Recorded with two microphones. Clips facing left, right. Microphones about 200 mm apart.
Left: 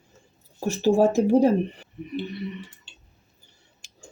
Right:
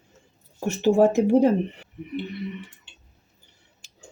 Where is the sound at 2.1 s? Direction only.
20° right (ahead or behind).